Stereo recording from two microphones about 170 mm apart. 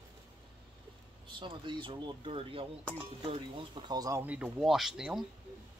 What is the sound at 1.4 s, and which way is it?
Speech, 30° right (ahead or behind).